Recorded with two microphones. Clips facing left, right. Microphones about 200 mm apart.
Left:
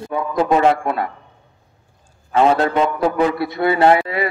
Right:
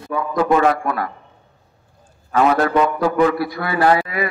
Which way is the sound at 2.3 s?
25° left (ahead or behind).